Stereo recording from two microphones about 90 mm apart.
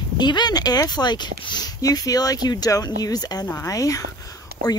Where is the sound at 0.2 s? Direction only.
55° left (ahead or behind).